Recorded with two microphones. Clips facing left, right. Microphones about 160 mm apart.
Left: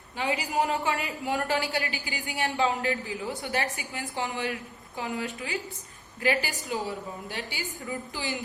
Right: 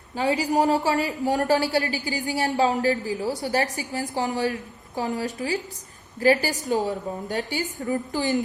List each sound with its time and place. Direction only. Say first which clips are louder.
0.2 s a woman's voice: right 6 dB; 40° right (ahead or behind)